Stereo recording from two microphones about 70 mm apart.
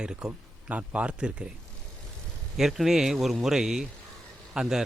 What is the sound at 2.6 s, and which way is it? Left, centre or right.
Speech, centre.